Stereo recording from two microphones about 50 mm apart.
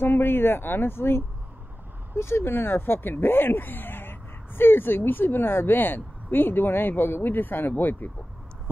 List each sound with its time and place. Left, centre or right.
0.0 s speech: left